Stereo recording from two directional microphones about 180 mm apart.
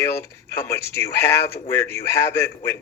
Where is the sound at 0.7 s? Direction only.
15° left (ahead or behind).